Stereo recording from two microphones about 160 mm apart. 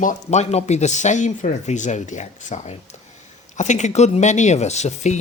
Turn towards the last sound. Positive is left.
turn(degrees=45)  # may be behind; listen again after turning